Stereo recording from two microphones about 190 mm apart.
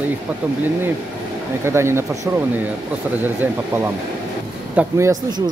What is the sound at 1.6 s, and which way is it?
Speech, 15° right (ahead or behind).